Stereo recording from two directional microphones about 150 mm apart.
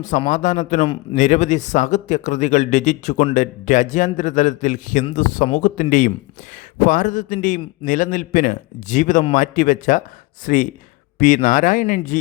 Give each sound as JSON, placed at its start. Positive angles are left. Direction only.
{"t": 0.3, "sound": "a man's voice", "side_deg": 55}